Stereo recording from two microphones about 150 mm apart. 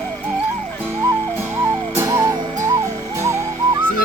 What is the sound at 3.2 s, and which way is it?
Whistling, 20° right (ahead or behind).